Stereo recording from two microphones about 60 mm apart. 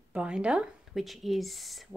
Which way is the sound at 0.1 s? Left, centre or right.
Centre.